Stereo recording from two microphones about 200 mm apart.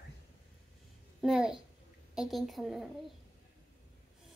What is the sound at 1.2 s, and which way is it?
Babbling, 5° right (ahead or behind).